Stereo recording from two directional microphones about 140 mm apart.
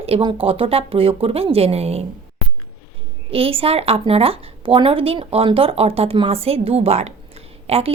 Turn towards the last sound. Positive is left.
turn(degrees=-45)  # may be behind; listen again after turning